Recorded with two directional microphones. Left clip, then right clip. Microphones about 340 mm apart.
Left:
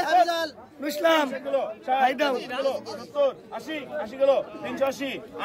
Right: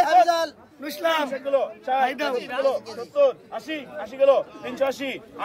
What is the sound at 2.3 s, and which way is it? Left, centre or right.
A man's voice, right.